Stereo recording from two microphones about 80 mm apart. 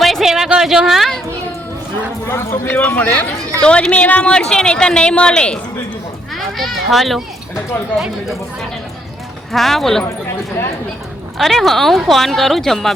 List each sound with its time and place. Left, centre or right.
0.0 s a sound: centre
2.2 s a man's voice: left
2.6 s a child's voice: centre
9.5 s speech: centre
11.3 s speech: centre